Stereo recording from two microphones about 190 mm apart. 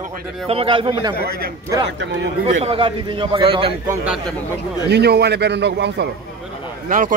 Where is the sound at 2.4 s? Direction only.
30° right (ahead or behind).